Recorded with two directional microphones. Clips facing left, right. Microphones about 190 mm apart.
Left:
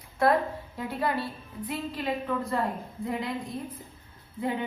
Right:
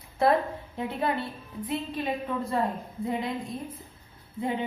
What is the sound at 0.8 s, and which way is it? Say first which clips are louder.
A woman's voice: right 1 dB; 25° right (ahead or behind).